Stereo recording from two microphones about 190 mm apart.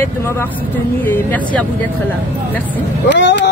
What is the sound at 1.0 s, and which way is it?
Speech, 10° left (ahead or behind).